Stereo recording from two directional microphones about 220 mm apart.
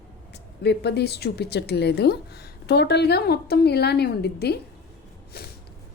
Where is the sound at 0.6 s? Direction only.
50° left (ahead or behind).